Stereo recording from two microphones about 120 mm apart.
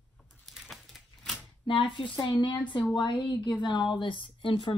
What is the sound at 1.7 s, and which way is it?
A woman's voice, 45° left (ahead or behind).